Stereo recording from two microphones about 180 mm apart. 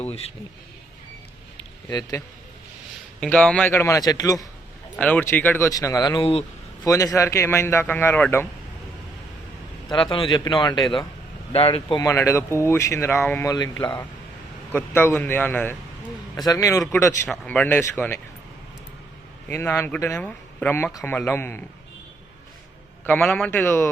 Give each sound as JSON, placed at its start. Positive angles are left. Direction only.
{"t": 0.0, "sound": "speech", "side_deg": 35}
{"t": 1.9, "sound": "a man's voice", "side_deg": 20}
{"t": 3.2, "sound": "speech", "side_deg": 5}
{"t": 4.9, "sound": "a man's voice", "side_deg": 10}
{"t": 9.9, "sound": "a man's voice", "side_deg": 25}
{"t": 13.1, "sound": "speech", "side_deg": 0}
{"t": 13.4, "sound": "a man's voice", "side_deg": 20}
{"t": 14.7, "sound": "a man's voice", "side_deg": 10}
{"t": 17.2, "sound": "speech", "side_deg": 5}
{"t": 19.5, "sound": "speech", "side_deg": 10}
{"t": 23.0, "sound": "speech", "side_deg": 10}